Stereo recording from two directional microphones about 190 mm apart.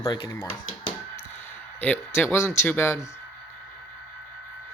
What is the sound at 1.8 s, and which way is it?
Speech, 10° left (ahead or behind).